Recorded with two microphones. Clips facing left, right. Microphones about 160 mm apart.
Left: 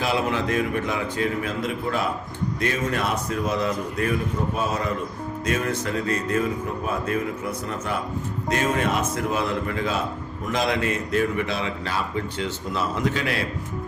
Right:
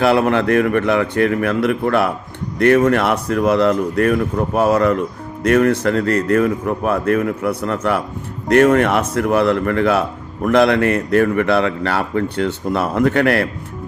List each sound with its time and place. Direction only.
0.0 s a man's voice: 65° right (ahead or behind)